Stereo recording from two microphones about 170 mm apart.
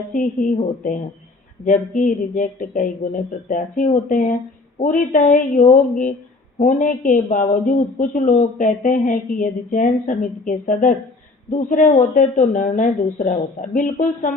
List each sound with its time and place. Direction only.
0.1 s a woman's voice: 50° left (ahead or behind)